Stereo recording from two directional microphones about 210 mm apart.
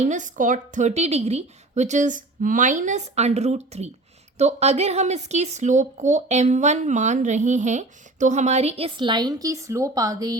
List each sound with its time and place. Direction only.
0.0 s speech: 35° right (ahead or behind); by 10.3 s 15° right (ahead or behind)